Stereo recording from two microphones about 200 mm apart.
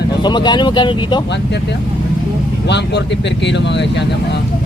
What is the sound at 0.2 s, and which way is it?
Speech, 20° left (ahead or behind).